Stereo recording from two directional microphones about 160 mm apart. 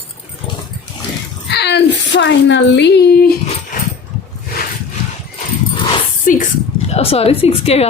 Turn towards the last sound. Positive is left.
turn(degrees=40)  # may be behind; listen again after turning